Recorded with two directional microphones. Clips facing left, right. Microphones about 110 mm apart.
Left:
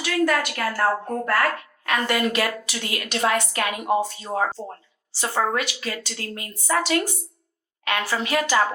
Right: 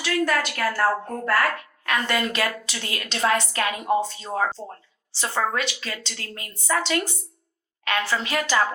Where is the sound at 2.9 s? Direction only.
30° right (ahead or behind).